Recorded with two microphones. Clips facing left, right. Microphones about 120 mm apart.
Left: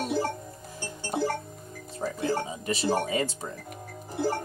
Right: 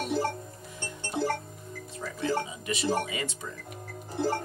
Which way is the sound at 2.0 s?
35° left (ahead or behind).